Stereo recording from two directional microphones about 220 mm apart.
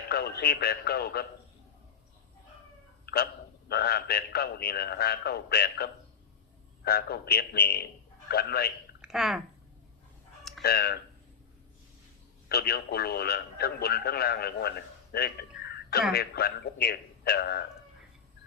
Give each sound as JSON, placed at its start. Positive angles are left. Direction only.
{"t": 0.1, "sound": "speech", "side_deg": 45}
{"t": 3.7, "sound": "speech", "side_deg": 45}
{"t": 9.0, "sound": "a sound", "side_deg": 0}
{"t": 10.6, "sound": "speech", "side_deg": 45}
{"t": 12.5, "sound": "a man's voice", "side_deg": 45}